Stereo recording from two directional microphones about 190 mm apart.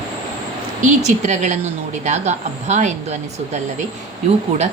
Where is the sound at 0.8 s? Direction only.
40° right (ahead or behind).